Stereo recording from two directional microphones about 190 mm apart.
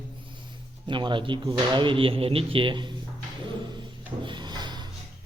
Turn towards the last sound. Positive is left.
turn(degrees=-25)  # may be behind; listen again after turning